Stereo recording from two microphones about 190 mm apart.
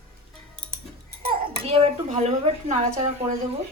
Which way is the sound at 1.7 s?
30° right (ahead or behind).